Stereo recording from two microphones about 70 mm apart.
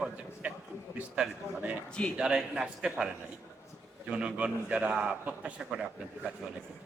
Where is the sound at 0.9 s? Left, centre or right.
Centre.